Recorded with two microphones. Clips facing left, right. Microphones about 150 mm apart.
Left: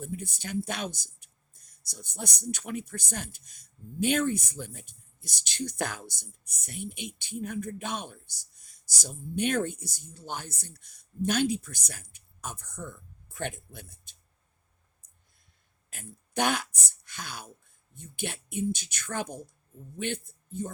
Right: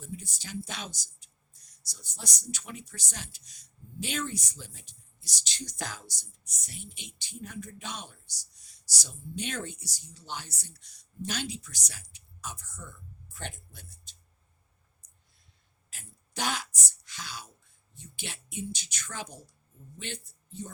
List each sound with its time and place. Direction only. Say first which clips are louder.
0.0 s speech: left 6 dB; 55° left (ahead or behind)
15.9 s a sound: left 9 dB; 55° left (ahead or behind)
17.9 s speech: left 7 dB; 50° left (ahead or behind)